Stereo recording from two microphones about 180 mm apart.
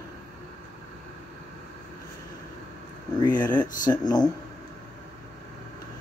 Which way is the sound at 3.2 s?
25° left (ahead or behind).